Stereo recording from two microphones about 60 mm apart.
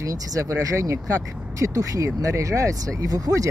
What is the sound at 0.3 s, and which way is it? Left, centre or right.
Speech, right.